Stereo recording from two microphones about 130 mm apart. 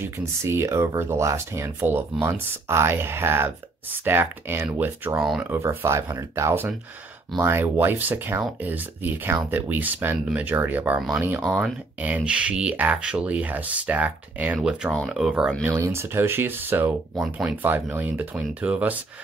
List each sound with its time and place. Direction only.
0.0 s speech: 20° right (ahead or behind)
5.2 s speech: 5° right (ahead or behind)
5.5 s speech: 15° right (ahead or behind)
15.6 s speech: 20° right (ahead or behind)
17.4 s speech: 5° right (ahead or behind)
17.6 s speech: 15° right (ahead or behind)